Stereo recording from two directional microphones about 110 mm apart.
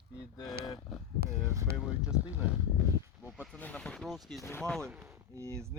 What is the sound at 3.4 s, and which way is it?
Speech, 10° left (ahead or behind).